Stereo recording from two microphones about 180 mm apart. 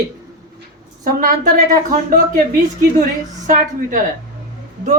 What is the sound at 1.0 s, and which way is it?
A woman's voice, 50° right (ahead or behind).